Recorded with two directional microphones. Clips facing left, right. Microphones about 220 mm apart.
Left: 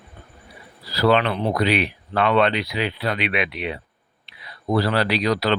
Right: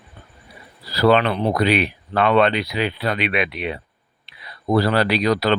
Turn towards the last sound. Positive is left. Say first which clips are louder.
# right 2 dB
turn(degrees=-50)  # may be behind; listen again after turning